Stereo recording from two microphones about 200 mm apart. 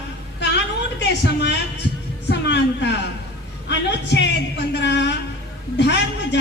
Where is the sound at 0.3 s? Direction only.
60° left (ahead or behind).